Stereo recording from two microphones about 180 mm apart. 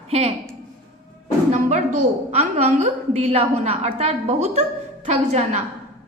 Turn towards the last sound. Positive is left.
turn(degrees=-40)  # may be behind; listen again after turning